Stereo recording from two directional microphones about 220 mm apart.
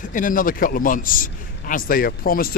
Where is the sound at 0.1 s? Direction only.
35° left (ahead or behind).